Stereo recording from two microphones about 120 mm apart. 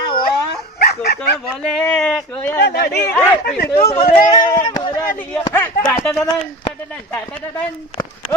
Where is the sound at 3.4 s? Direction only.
75° left (ahead or behind).